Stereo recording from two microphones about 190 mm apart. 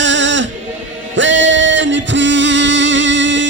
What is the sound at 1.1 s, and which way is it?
Music, 75° right (ahead or behind).